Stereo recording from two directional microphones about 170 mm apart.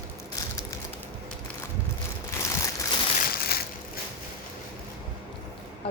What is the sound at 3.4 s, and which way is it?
Crushing, 65° left (ahead or behind).